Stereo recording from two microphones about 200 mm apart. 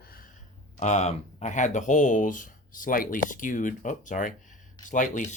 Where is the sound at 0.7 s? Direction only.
35° left (ahead or behind).